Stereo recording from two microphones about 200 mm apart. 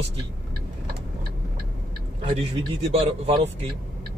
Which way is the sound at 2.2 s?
30° right (ahead or behind).